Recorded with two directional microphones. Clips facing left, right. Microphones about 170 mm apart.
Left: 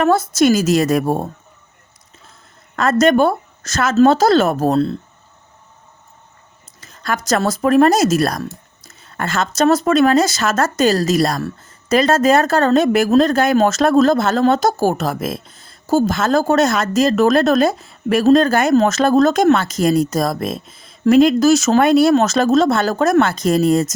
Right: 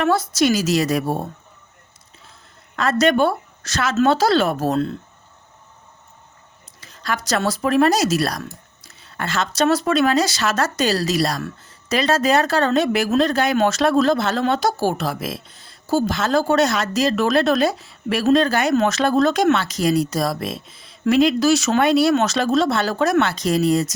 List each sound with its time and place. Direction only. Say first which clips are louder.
0.0 s speech: left 4 dB; 50° left (ahead or behind)
2.7 s speech: left 4 dB; 45° left (ahead or behind)
6.7 s speech: left 3 dB; 45° left (ahead or behind)